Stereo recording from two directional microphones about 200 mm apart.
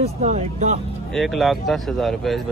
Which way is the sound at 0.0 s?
35° right (ahead or behind).